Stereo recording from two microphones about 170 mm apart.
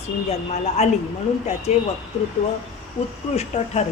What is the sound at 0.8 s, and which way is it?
A woman's voice, 40° left (ahead or behind).